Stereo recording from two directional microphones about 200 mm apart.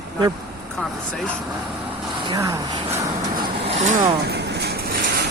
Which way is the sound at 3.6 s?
35° right (ahead or behind).